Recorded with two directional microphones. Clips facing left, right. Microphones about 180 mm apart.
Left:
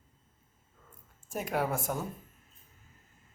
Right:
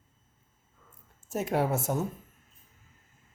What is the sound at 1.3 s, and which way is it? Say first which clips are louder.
Speech: right 4 dB; 25° right (ahead or behind).